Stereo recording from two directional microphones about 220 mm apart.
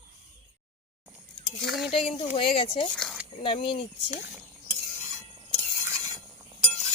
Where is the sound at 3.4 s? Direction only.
25° left (ahead or behind).